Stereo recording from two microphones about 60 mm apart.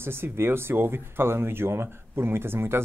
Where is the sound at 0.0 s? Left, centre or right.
Right.